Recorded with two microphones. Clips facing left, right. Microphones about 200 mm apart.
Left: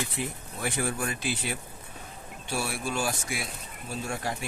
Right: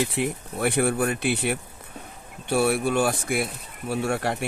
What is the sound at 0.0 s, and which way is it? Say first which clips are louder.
Speech: right 8 dB; 70° right (ahead or behind).